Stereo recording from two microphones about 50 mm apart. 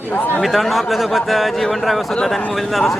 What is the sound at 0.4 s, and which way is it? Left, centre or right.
Speech, centre.